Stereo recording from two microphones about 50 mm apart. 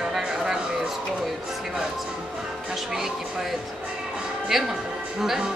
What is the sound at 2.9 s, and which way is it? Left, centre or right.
Speech, centre.